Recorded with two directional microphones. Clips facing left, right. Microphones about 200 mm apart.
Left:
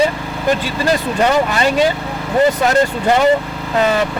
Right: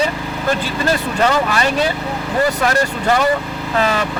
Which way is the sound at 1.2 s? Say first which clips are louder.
Left 1 dB; 20° left (ahead or behind).